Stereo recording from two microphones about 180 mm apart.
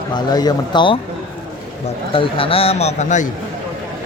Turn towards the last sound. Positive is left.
turn(degrees=45)  # may be behind; listen again after turning